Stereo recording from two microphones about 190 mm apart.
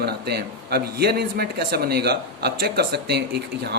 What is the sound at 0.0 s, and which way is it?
A man's voice, 60° right (ahead or behind).